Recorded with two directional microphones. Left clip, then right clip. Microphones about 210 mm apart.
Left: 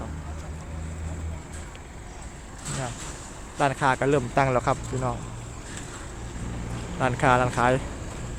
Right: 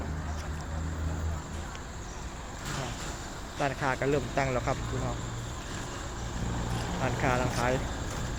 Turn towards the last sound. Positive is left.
turn(degrees=30)  # may be behind; listen again after turning